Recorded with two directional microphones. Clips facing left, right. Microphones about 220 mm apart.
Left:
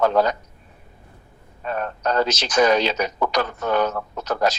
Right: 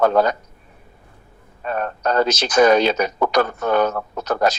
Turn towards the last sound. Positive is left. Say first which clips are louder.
# right 2 dB
turn(degrees=-55)  # may be behind; listen again after turning